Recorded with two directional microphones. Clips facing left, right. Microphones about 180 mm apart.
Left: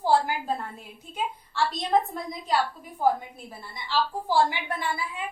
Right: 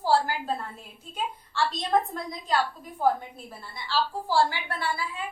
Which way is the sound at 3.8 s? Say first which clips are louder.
Left 1 dB; 15° left (ahead or behind).